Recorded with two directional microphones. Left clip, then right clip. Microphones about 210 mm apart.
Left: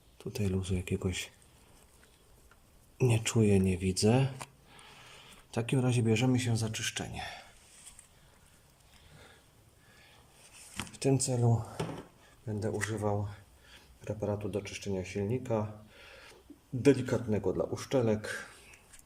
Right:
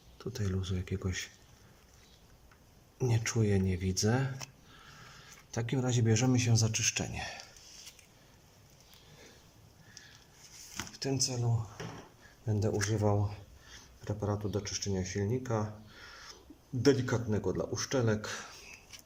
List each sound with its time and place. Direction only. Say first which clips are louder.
0.2 s speech: left 3 dB; 10° left (ahead or behind)
3.0 s speech: left 4 dB; 10° left (ahead or behind)
5.5 s speech: left 2 dB; 10° left (ahead or behind)
10.8 s speech: left 3 dB; 15° left (ahead or behind)
11.8 s a sound: left 6 dB; 50° left (ahead or behind)
12.5 s speech: right 2 dB; centre (ahead or behind)